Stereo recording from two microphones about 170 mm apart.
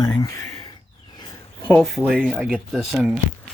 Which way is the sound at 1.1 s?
25° left (ahead or behind).